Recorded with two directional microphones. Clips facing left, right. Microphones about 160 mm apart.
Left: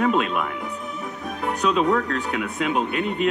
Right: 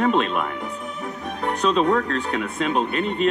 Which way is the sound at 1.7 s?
10° left (ahead or behind).